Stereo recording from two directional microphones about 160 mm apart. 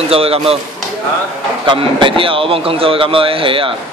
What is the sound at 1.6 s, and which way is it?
Speech, 30° right (ahead or behind).